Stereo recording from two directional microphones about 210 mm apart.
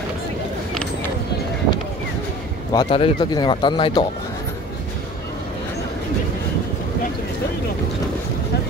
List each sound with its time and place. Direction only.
2.7 s speech: 25° left (ahead or behind)